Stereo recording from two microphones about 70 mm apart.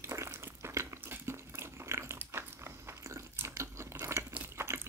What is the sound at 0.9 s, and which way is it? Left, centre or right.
Dog, right.